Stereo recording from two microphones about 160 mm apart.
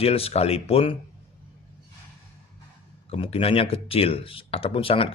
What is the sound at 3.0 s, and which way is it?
Speech, 35° left (ahead or behind).